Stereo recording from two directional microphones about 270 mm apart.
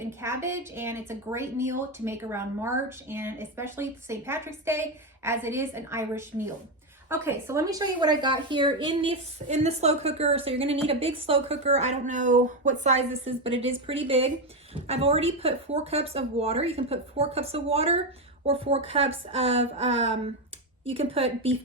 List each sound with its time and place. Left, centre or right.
0.0 s a woman's voice: centre